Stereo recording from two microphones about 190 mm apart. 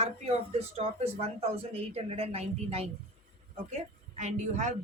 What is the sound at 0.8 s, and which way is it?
Speech, 35° right (ahead or behind).